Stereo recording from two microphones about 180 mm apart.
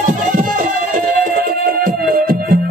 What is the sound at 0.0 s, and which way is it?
Music, 45° right (ahead or behind).